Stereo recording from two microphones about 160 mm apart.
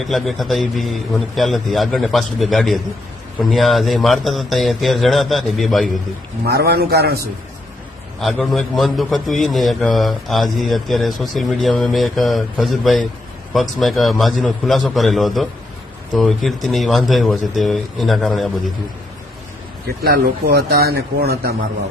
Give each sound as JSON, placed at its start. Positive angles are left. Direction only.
{"t": 0.0, "sound": "a man's voice", "side_deg": 0}
{"t": 6.4, "sound": "a man's voice", "side_deg": -80}
{"t": 8.2, "sound": "a man's voice", "side_deg": 0}
{"t": 20.0, "sound": "speech", "side_deg": -85}